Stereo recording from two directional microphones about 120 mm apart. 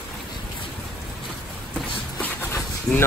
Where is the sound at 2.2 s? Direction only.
20° left (ahead or behind).